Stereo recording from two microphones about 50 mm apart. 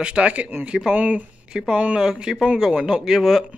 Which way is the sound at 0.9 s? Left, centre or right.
Right.